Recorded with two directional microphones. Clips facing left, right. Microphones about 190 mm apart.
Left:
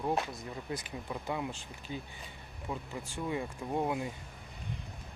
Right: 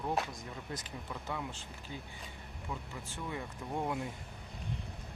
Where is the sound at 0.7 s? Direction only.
10° left (ahead or behind).